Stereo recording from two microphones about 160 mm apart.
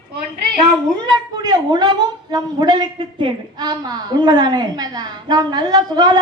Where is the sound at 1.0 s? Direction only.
25° right (ahead or behind).